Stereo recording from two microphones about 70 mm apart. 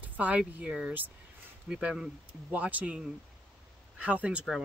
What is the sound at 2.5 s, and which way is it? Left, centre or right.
Speech, right.